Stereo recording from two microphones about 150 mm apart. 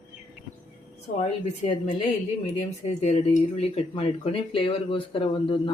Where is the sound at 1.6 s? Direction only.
55° left (ahead or behind).